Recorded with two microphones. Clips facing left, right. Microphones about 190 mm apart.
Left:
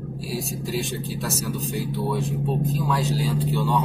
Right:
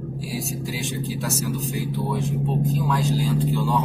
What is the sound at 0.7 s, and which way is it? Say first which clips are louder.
Speech: left 1 dB; centre (ahead or behind).